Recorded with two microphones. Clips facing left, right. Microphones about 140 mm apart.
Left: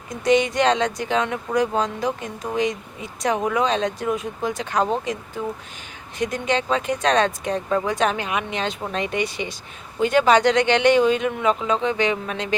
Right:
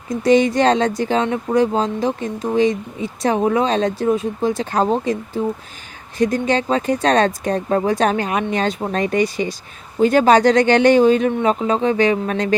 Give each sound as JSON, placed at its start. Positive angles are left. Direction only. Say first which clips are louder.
{"t": 0.2, "sound": "speech", "louder": "right 4 dB", "side_deg": -35}